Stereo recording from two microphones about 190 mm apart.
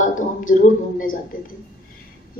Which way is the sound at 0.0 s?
45° left (ahead or behind).